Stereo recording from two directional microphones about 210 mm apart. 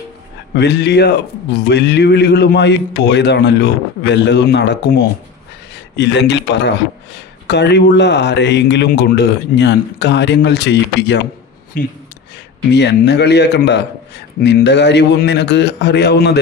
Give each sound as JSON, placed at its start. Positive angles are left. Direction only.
{"t": 0.5, "sound": "a man's voice", "side_deg": 55}
{"t": 11.8, "sound": "speech", "side_deg": 45}
{"t": 12.7, "sound": "a man's voice", "side_deg": 55}